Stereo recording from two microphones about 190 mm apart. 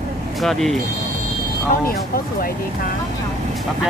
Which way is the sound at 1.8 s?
50° left (ahead or behind).